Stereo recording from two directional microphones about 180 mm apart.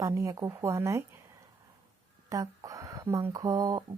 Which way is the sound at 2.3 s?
20° right (ahead or behind).